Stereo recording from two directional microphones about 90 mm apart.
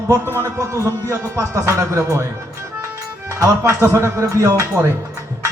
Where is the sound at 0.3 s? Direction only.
30° right (ahead or behind).